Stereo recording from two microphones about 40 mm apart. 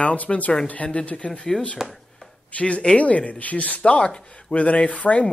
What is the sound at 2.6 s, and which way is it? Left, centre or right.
Speech, left.